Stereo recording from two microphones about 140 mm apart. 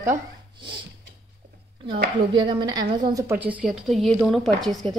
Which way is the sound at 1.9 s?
35° right (ahead or behind).